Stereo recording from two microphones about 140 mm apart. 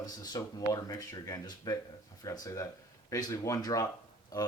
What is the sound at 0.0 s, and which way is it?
Speech, 25° left (ahead or behind).